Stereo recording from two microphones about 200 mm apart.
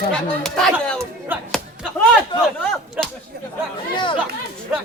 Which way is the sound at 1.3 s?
10° right (ahead or behind).